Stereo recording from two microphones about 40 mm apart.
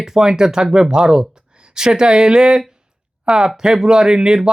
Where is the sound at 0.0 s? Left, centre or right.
Centre.